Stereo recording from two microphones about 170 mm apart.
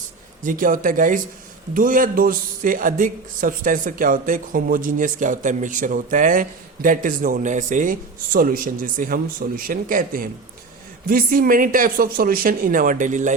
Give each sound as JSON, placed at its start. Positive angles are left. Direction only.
{"t": 0.4, "sound": "speech", "side_deg": -50}